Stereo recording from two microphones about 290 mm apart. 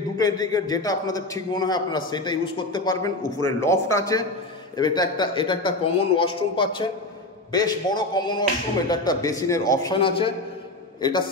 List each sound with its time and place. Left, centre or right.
0.2 s a man's voice: centre